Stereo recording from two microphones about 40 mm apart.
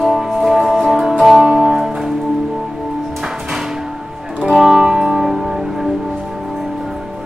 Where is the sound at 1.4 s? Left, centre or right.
Centre.